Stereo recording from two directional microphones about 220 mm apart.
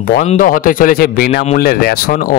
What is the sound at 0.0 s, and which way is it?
Speech, 40° left (ahead or behind).